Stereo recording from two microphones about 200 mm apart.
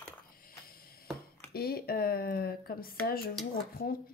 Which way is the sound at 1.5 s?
50° left (ahead or behind).